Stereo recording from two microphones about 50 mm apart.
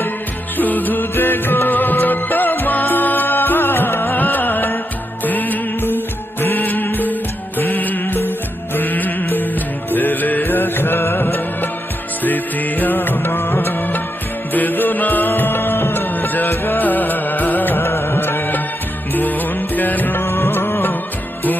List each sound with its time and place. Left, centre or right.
0.6 s music: left
12.2 s music: left
16.1 s music: left
17.8 s music: left
19.1 s music: left
20.2 s music: left